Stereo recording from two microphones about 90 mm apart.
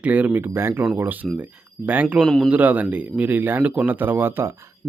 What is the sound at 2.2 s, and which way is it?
Speech, 5° left (ahead or behind).